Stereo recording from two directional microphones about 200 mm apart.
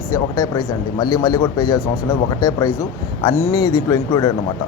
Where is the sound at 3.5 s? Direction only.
20° left (ahead or behind).